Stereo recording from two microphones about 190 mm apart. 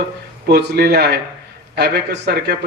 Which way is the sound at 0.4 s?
55° right (ahead or behind).